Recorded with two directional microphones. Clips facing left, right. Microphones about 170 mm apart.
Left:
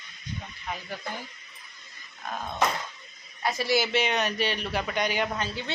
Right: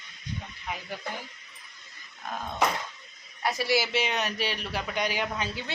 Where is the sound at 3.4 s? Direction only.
5° right (ahead or behind).